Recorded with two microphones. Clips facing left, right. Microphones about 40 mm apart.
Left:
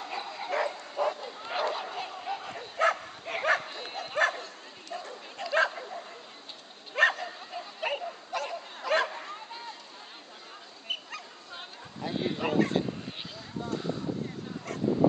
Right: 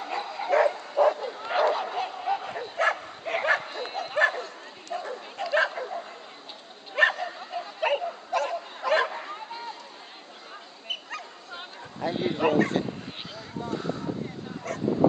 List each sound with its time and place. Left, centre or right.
0.0 s bow-wow: centre
0.5 s bow-wow: right
7.1 s bow-wow: centre
7.8 s dog: centre
8.5 s bow-wow: centre
12.0 s speech: centre
12.5 s speech: right